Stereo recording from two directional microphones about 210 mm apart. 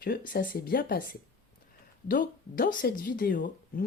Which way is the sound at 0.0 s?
45° left (ahead or behind).